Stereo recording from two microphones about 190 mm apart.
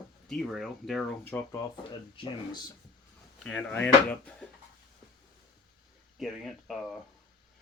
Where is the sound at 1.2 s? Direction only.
15° left (ahead or behind).